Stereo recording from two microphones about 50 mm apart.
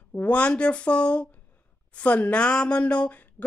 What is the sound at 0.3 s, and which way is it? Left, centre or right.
A woman's voice, left.